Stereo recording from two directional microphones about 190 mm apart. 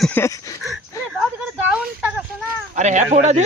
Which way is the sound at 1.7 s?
5° right (ahead or behind).